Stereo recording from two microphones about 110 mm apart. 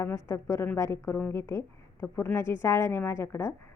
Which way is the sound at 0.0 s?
25° left (ahead or behind).